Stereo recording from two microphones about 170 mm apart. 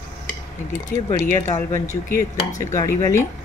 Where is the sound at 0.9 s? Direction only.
65° left (ahead or behind).